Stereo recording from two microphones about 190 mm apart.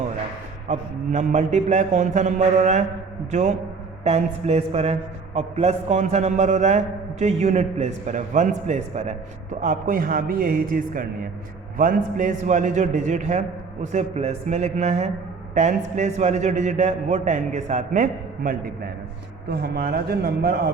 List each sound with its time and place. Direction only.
0.7 s a man's voice: 40° right (ahead or behind)
4.0 s a man's voice: 35° right (ahead or behind); by 20.6 s 60° right (ahead or behind)